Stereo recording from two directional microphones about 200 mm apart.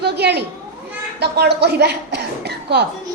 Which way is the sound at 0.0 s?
55° right (ahead or behind).